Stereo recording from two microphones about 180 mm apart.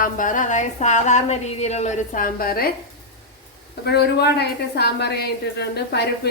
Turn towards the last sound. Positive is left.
turn(degrees=65)  # may be behind; listen again after turning